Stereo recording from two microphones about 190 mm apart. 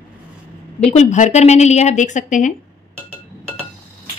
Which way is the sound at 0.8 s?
35° left (ahead or behind).